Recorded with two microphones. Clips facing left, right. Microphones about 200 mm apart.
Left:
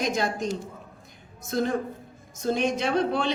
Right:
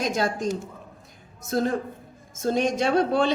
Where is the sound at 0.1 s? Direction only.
45° right (ahead or behind).